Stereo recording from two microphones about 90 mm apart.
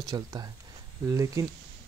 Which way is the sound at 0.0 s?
45° right (ahead or behind).